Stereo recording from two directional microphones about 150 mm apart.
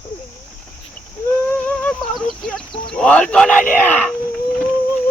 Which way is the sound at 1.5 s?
5° left (ahead or behind).